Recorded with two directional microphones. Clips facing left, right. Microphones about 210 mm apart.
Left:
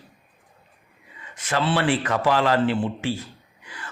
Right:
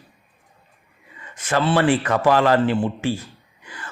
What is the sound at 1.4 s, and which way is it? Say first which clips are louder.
A man's voice: right 4 dB; 45° right (ahead or behind).